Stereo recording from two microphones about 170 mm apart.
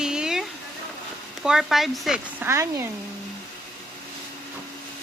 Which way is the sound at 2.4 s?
15° right (ahead or behind).